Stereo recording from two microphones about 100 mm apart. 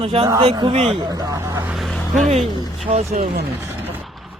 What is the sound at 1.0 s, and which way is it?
Speech, 40° right (ahead or behind).